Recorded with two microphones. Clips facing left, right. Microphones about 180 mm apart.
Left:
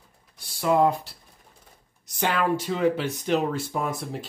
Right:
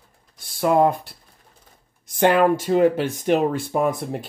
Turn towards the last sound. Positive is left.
turn(degrees=-60)  # may be behind; listen again after turning